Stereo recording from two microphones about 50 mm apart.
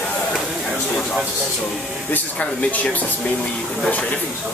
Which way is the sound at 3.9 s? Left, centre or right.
Left.